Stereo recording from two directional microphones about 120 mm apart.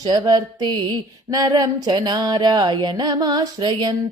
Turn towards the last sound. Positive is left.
turn(degrees=-35)  # may be behind; listen again after turning